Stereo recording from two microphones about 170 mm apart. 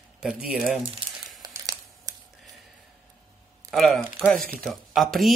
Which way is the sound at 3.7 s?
Centre (ahead or behind).